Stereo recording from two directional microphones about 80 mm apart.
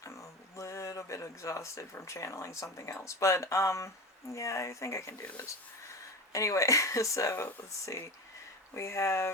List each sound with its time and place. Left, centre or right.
0.0 s a sound: left
2.7 s speech: left
5.2 s speech: centre
5.9 s speech: left